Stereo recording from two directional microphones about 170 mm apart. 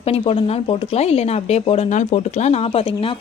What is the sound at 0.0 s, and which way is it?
Speech, 35° left (ahead or behind).